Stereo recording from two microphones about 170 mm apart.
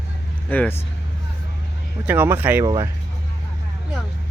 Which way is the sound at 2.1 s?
10° right (ahead or behind).